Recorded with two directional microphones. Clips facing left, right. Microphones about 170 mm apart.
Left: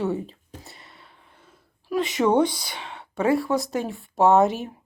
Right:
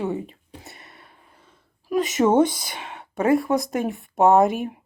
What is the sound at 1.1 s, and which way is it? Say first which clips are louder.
Throat clearing: even; centre (ahead or behind).